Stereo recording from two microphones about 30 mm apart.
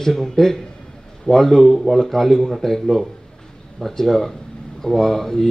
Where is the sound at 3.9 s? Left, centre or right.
Centre.